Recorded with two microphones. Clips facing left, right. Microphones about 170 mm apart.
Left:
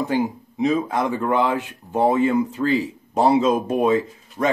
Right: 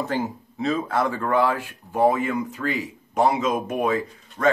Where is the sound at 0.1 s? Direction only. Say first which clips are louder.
Left 4 dB; 15° left (ahead or behind).